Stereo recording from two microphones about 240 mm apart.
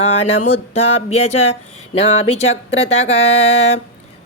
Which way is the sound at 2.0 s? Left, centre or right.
Left.